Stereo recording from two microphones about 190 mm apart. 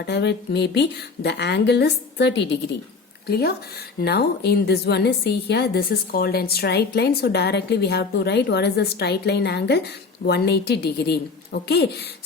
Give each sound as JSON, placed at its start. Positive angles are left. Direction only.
{"t": 0.0, "sound": "a woman's voice", "side_deg": 60}